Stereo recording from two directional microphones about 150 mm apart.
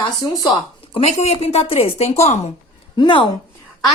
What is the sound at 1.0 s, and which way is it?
A woman's voice, 45° left (ahead or behind).